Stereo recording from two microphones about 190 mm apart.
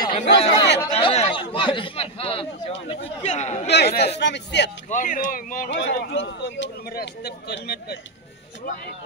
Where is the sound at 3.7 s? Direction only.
60° left (ahead or behind).